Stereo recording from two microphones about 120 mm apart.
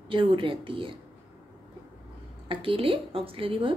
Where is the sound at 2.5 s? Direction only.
45° right (ahead or behind).